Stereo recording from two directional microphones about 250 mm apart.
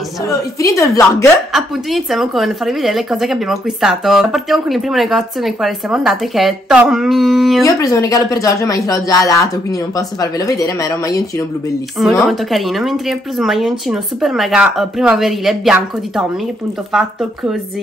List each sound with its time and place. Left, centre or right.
0.3 s speech: centre
1.5 s a woman's voice: centre
7.6 s speech: centre
12.0 s a woman's voice: centre